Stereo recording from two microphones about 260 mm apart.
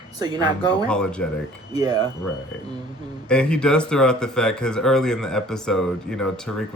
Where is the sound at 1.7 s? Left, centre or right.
Centre.